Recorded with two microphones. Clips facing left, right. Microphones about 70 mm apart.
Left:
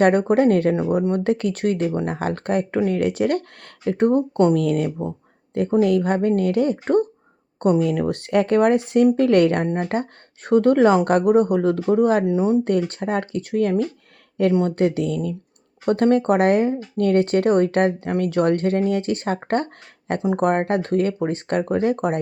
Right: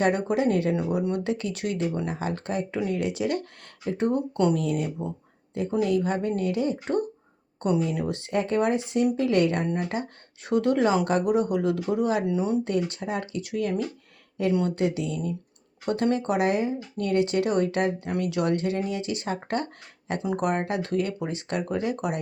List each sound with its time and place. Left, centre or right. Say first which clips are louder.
0.0 s speech: left 7 dB; left
2.0 s speech: left 6 dB; left
9.6 s speech: left 4 dB; left
9.9 s speech: left 7 dB; left
12.2 s speech: left 6 dB; left
12.6 s speech: left 6 dB; left